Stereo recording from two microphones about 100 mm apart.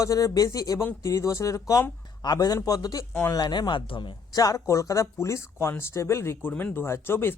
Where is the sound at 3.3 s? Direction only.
45° left (ahead or behind).